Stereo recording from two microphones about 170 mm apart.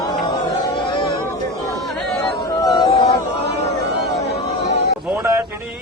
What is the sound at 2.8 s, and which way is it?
Chatter, 35° left (ahead or behind).